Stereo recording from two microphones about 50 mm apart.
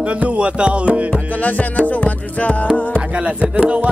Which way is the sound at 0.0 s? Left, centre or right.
Right.